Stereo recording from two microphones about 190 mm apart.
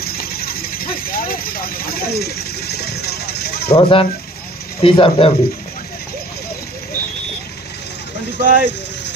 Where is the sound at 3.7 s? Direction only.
30° left (ahead or behind).